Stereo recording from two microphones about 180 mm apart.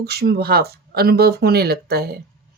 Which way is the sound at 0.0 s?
60° right (ahead or behind).